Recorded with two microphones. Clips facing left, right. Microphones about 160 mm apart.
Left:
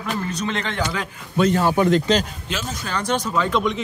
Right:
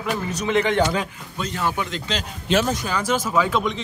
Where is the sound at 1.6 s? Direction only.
35° left (ahead or behind).